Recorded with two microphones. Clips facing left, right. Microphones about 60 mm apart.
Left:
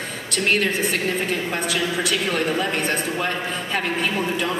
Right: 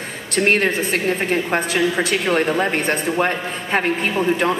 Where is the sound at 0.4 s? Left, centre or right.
Right.